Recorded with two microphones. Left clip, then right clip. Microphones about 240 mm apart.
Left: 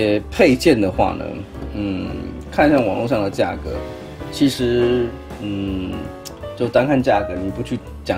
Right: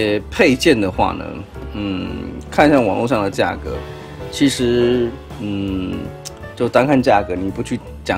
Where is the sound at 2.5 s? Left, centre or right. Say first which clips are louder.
Right 2 dB; centre.